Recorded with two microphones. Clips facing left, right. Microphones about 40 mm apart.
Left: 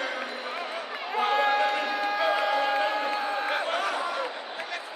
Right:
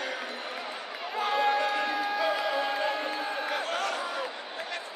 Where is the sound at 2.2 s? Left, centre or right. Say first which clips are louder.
Left 5 dB; left.